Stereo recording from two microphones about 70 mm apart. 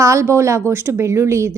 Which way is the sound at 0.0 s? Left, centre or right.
Right.